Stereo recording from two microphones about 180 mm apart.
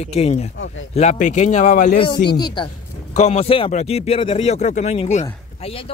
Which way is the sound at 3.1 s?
35° left (ahead or behind).